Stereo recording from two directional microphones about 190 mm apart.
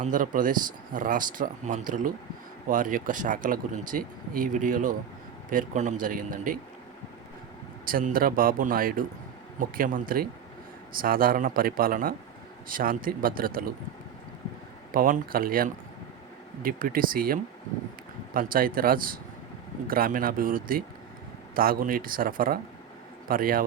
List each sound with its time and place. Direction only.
0.0 s speech: 45° right (ahead or behind)
7.9 s speech: 50° right (ahead or behind)
14.9 s speech: 50° right (ahead or behind)